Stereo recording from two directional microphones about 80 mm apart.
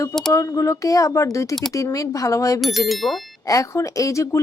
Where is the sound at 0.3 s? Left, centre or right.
Left.